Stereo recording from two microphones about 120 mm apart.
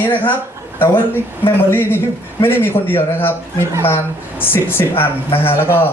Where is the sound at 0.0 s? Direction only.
15° left (ahead or behind).